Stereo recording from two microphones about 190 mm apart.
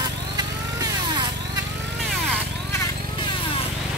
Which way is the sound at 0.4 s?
20° right (ahead or behind).